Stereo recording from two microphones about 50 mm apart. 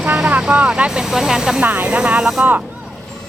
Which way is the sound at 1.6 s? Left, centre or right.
Right.